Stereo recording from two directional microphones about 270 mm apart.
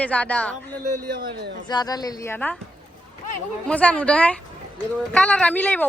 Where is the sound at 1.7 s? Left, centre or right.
Centre.